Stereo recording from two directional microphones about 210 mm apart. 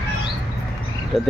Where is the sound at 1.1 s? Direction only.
Centre (ahead or behind).